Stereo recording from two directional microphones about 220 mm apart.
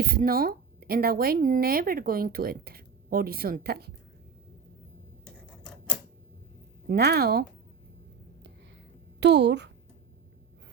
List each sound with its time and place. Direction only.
0.0 s speech: 40° right (ahead or behind)
6.8 s speech: 45° right (ahead or behind)
9.2 s speech: 50° right (ahead or behind)